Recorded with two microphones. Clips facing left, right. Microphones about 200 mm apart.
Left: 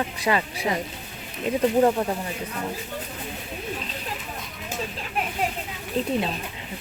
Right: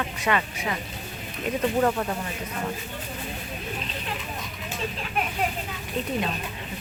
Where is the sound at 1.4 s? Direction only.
20° left (ahead or behind).